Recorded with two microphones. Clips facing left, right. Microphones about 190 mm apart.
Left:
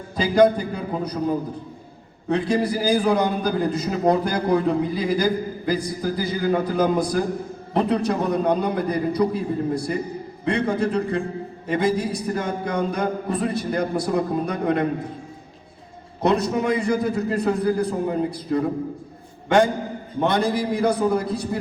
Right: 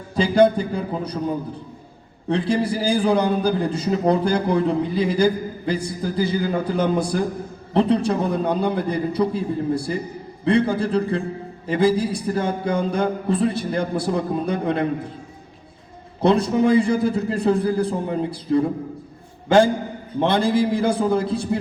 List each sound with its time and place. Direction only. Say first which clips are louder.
0.2 s a man's voice: right 1 dB; 30° right (ahead or behind)
2.3 s a man's voice: even; 30° right (ahead or behind)
16.2 s a man's voice: right 3 dB; 30° right (ahead or behind)